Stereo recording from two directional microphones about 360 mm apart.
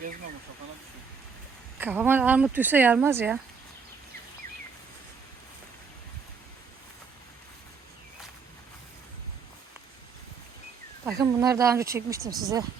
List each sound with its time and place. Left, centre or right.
1.8 s speech: centre
11.0 s speech: centre